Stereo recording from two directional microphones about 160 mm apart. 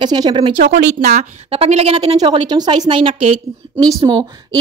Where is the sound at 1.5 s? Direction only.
40° right (ahead or behind).